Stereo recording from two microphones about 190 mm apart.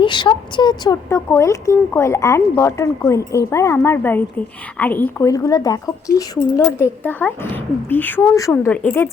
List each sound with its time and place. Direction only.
0.0 s a woman's voice: 25° left (ahead or behind); by 9.0 s 10° left (ahead or behind)